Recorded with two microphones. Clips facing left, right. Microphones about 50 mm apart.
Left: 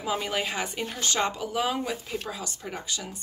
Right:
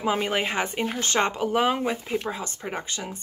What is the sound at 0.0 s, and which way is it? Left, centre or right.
A woman's voice, right.